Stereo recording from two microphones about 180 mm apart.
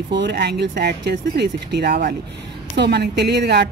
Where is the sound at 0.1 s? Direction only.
70° right (ahead or behind).